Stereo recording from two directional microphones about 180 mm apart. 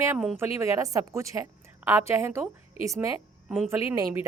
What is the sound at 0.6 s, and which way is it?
A woman's voice, 20° right (ahead or behind).